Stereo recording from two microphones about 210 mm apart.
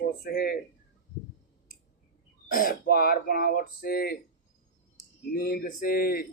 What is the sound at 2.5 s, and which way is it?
Speech, 40° left (ahead or behind).